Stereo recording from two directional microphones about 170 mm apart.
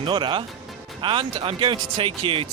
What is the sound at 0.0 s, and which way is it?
Speech, 30° right (ahead or behind).